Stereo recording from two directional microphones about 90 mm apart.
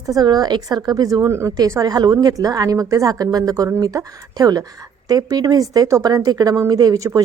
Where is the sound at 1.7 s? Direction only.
45° right (ahead or behind).